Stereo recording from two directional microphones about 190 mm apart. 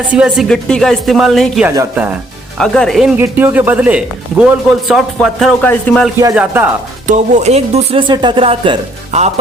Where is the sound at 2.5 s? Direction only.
5° left (ahead or behind).